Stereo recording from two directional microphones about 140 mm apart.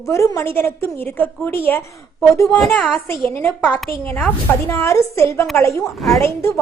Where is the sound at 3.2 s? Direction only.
15° left (ahead or behind).